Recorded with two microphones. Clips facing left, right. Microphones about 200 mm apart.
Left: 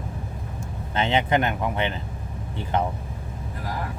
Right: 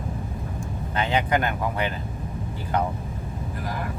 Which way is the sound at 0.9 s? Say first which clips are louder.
Left 2 dB; 25° left (ahead or behind).